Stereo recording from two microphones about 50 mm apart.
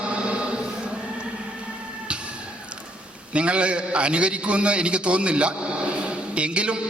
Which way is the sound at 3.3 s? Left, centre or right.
Right.